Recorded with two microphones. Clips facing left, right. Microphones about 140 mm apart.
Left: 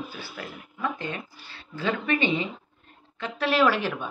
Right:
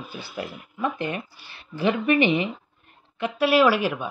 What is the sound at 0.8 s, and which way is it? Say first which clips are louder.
Speech: right 4 dB; 15° right (ahead or behind).